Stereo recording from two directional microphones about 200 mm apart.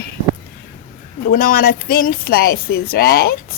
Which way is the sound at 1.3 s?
45° left (ahead or behind).